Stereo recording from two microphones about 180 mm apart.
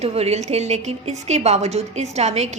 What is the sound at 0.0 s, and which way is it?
A woman's voice, 35° right (ahead or behind).